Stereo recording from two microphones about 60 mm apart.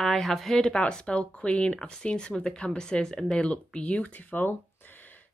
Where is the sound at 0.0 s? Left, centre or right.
Centre.